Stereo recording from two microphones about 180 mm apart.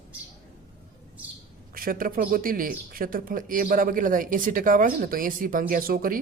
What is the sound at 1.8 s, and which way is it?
Speech, 50° right (ahead or behind).